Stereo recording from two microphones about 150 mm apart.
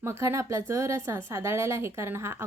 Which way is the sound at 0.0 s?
15° right (ahead or behind).